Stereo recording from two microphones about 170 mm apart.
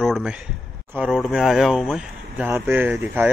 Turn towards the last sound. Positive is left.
turn(degrees=-10)  # may be behind; listen again after turning